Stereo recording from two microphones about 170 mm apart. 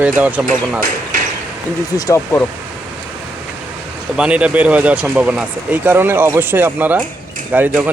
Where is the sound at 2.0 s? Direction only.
20° left (ahead or behind).